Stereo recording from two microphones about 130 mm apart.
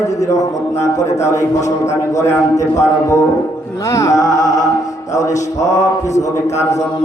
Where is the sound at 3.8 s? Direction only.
25° left (ahead or behind).